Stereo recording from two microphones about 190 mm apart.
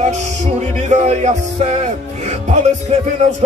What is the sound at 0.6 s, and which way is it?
Music, 35° right (ahead or behind).